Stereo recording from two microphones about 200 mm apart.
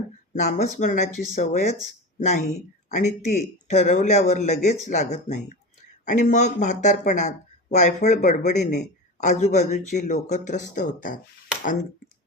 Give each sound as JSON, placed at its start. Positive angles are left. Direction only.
{"t": 0.3, "sound": "speech", "side_deg": 35}